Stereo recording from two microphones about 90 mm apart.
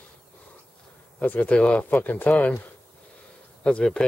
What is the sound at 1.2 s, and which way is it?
Speech, 20° left (ahead or behind).